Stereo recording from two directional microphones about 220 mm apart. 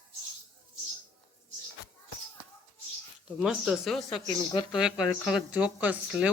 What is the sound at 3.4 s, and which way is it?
Speech, 5° right (ahead or behind).